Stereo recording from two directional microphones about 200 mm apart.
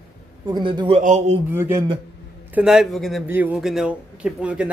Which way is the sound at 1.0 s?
35° right (ahead or behind).